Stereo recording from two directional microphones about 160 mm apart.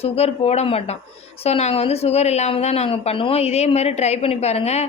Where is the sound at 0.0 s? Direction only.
40° left (ahead or behind).